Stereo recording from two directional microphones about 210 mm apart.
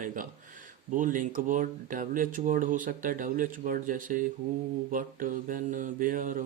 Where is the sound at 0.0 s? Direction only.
40° right (ahead or behind).